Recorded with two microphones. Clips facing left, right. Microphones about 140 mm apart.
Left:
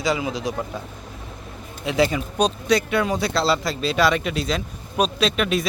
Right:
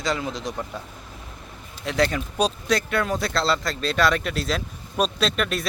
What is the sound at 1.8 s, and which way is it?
Speech, 5° left (ahead or behind).